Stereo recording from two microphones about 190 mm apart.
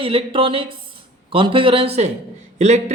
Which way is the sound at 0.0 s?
30° right (ahead or behind).